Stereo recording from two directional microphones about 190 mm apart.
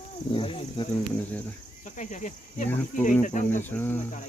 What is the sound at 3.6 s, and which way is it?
Speech, 10° left (ahead or behind).